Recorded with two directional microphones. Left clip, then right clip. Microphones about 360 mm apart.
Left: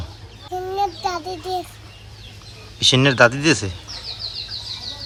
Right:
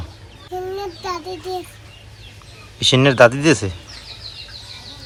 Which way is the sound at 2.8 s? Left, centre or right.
Centre.